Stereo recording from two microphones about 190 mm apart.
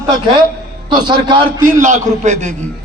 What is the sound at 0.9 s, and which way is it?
Speech, 25° right (ahead or behind).